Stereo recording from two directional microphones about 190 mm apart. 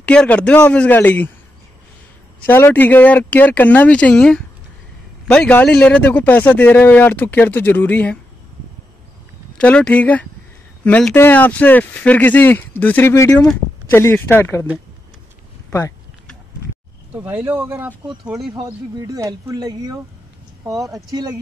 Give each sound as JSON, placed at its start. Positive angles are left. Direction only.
{"t": 0.0, "sound": "speech", "side_deg": 5}
{"t": 2.4, "sound": "speech", "side_deg": 10}
{"t": 9.6, "sound": "speech", "side_deg": 5}
{"t": 17.1, "sound": "speech", "side_deg": -5}
{"t": 18.7, "sound": "speech", "side_deg": -15}